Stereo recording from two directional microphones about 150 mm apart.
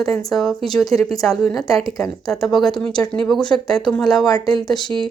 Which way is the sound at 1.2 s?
Centre (ahead or behind).